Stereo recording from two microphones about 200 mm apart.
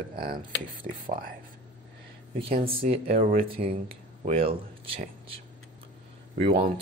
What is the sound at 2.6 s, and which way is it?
Speech, 30° right (ahead or behind).